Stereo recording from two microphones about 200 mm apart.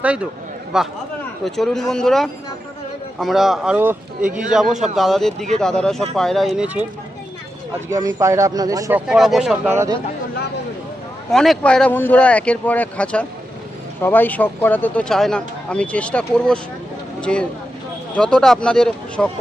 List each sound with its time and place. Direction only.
0.0 s speech: 5° right (ahead or behind)
4.9 s speech: centre (ahead or behind)
7.9 s speech: 15° right (ahead or behind)
9.0 s speech: centre (ahead or behind)
11.3 s speech: centre (ahead or behind)